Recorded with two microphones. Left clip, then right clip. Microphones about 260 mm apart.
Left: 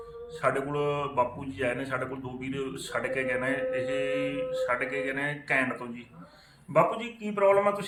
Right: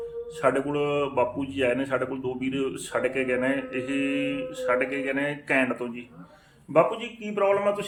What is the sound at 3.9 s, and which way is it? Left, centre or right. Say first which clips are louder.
Mantra: right 1 dB; right.